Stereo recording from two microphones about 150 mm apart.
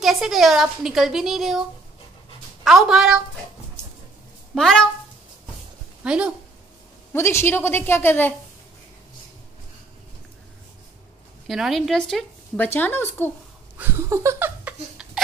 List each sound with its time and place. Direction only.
0.0 s a woman's voice: centre (ahead or behind)
2.6 s a woman's voice: centre (ahead or behind)
4.6 s a woman's voice: 5° left (ahead or behind)
6.0 s speech: 5° right (ahead or behind)
7.1 s a woman's voice: 15° left (ahead or behind)
11.4 s a woman's voice: centre (ahead or behind)
12.6 s a woman's voice: 15° left (ahead or behind)
13.7 s a sound: 15° right (ahead or behind)